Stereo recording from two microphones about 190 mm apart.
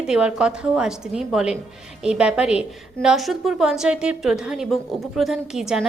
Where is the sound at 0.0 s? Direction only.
5° right (ahead or behind).